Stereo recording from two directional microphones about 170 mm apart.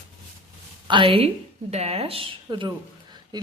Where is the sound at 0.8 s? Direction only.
30° right (ahead or behind).